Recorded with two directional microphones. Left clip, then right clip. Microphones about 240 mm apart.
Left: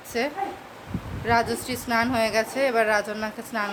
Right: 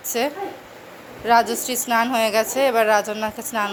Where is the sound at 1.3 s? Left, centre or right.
Centre.